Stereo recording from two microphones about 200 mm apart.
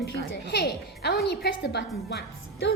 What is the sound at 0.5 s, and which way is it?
Speech, 55° left (ahead or behind).